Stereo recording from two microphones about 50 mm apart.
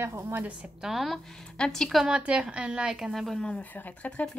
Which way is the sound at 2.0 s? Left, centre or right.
Right.